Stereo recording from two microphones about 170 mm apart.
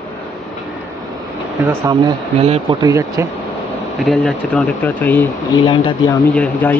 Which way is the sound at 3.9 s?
5° left (ahead or behind).